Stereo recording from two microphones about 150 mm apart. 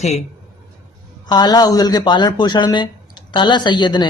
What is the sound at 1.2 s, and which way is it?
Speech, 25° left (ahead or behind).